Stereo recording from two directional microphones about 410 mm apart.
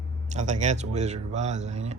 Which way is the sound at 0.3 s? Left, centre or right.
Centre.